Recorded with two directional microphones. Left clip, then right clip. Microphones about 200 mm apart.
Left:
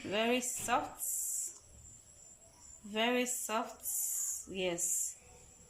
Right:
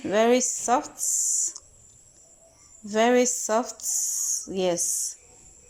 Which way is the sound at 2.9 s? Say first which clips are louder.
Right 13 dB; 25° right (ahead or behind).